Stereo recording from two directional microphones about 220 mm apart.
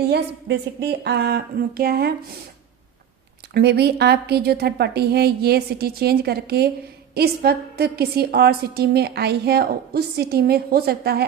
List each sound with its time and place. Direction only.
0.1 s a woman's voice: 50° right (ahead or behind)
3.5 s a woman's voice: 50° right (ahead or behind)